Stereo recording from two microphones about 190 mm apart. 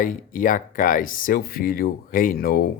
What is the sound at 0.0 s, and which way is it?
Speech, 45° left (ahead or behind).